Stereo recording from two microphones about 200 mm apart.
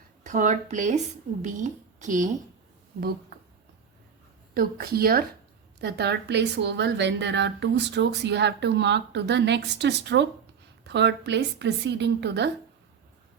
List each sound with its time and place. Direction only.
0.3 s speech: 40° right (ahead or behind)
4.5 s a woman's voice: 50° right (ahead or behind)